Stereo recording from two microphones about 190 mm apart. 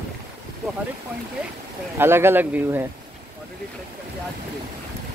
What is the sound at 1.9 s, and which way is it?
Speech, 10° right (ahead or behind).